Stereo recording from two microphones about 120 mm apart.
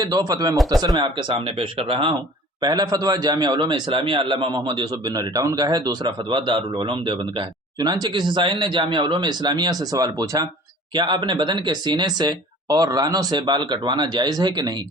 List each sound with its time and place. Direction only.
0.0 s a man's voice: 30° right (ahead or behind)
0.5 s speech: centre (ahead or behind)
1.0 s speech: 55° right (ahead or behind)
2.6 s a man's voice: 35° right (ahead or behind)